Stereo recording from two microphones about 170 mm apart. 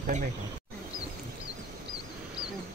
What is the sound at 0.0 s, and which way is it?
Speech, 45° right (ahead or behind).